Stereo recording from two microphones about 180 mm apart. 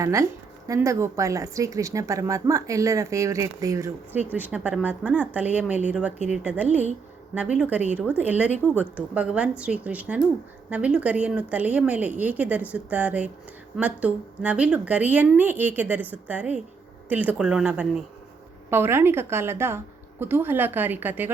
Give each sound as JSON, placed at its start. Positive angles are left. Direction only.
{"t": 0.0, "sound": "speech", "side_deg": -15}
{"t": 8.6, "sound": "a woman's voice", "side_deg": 10}
{"t": 9.0, "sound": "speech", "side_deg": -5}